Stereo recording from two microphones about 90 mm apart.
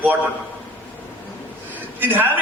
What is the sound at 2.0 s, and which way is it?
Speech, 20° right (ahead or behind).